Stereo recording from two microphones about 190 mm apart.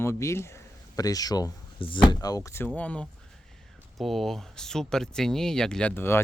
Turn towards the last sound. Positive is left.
turn(degrees=10)  # may be behind; listen again after turning